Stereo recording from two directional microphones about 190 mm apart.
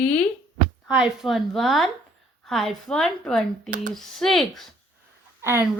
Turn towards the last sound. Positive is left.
turn(degrees=-15)  # may be behind; listen again after turning